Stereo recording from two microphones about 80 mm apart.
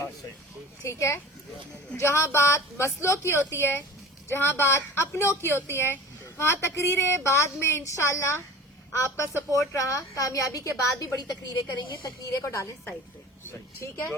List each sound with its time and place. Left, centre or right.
0.9 s a woman's voice: left